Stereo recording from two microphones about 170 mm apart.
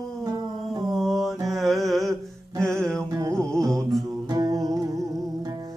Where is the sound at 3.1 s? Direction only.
20° right (ahead or behind).